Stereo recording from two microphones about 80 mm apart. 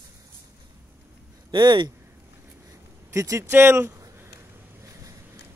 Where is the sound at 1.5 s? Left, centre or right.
Right.